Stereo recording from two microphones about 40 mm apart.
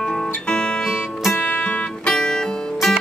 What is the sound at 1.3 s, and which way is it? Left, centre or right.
Music, left.